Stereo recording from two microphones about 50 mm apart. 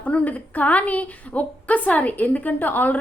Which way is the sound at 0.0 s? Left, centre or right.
Left.